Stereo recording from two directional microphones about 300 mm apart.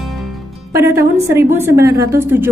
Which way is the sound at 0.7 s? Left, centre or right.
Centre.